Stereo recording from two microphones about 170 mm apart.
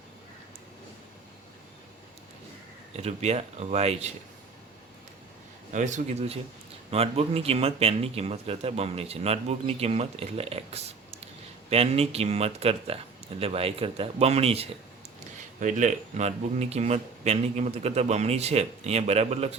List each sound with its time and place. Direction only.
2.9 s speech: 40° right (ahead or behind)
5.7 s speech: 45° right (ahead or behind)